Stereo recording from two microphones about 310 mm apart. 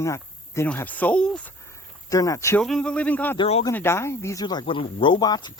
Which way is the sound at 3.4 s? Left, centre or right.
Centre.